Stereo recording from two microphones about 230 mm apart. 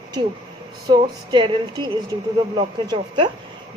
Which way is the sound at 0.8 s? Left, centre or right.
Centre.